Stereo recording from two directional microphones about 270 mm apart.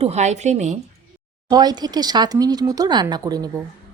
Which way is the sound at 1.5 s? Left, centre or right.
Centre.